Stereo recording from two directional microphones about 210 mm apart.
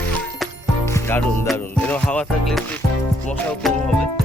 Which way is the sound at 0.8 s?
10° left (ahead or behind).